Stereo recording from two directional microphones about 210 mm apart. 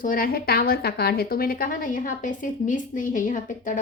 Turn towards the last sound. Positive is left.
turn(degrees=40)  # may be behind; listen again after turning